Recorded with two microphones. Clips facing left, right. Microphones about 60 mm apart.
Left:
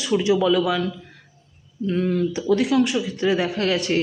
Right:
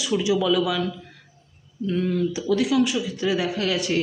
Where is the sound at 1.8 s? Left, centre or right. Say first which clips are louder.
Left 2 dB; left.